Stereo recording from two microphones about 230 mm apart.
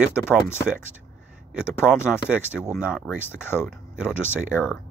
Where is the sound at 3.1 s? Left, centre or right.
Centre.